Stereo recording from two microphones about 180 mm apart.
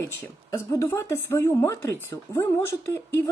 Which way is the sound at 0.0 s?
15° left (ahead or behind).